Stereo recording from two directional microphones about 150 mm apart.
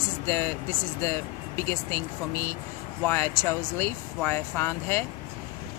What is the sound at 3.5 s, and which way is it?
Speech, 15° left (ahead or behind).